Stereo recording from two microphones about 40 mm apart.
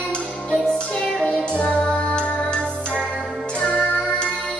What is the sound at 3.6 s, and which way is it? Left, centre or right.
Music, left.